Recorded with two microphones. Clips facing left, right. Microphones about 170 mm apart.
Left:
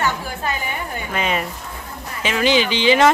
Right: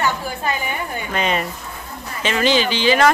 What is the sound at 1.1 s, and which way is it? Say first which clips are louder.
Speech: right 1 dB; 5° left (ahead or behind).